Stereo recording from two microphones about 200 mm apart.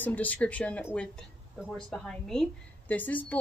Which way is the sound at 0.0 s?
10° left (ahead or behind).